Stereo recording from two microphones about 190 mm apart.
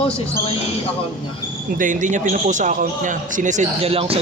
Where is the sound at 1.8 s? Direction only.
40° right (ahead or behind).